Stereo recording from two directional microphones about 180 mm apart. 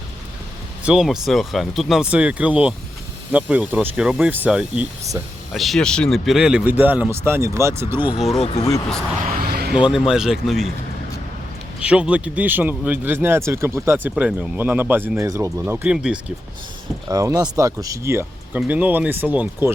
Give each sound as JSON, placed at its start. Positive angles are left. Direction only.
{"t": 0.9, "sound": "speech", "side_deg": -5}
{"t": 8.4, "sound": "speech", "side_deg": 35}
{"t": 9.4, "sound": "a sound", "side_deg": -60}
{"t": 9.7, "sound": "speech", "side_deg": -5}
{"t": 11.8, "sound": "speech", "side_deg": -5}
{"t": 17.1, "sound": "speech", "side_deg": -20}